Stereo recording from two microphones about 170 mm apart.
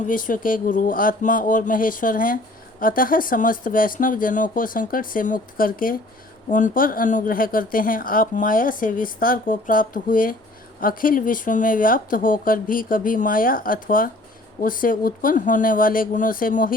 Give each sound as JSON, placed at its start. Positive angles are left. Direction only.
{"t": 0.1, "sound": "a woman's voice", "side_deg": 55}